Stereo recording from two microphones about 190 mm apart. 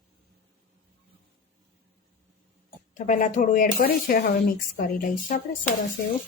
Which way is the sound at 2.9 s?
40° left (ahead or behind).